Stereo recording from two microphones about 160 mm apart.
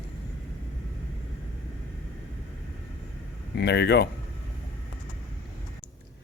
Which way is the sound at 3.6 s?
90° left.